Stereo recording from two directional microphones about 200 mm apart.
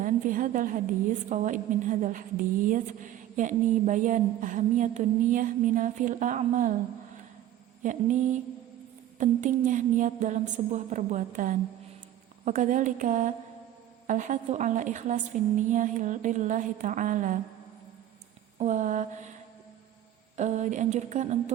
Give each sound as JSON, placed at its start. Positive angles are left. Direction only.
{"t": 0.0, "sound": "a woman's voice", "side_deg": -40}
{"t": 7.8, "sound": "a woman's voice", "side_deg": -40}
{"t": 18.6, "sound": "a woman's voice", "side_deg": -40}
{"t": 20.3, "sound": "a woman's voice", "side_deg": -35}